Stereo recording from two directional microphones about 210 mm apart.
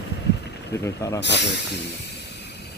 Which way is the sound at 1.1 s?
55° left (ahead or behind).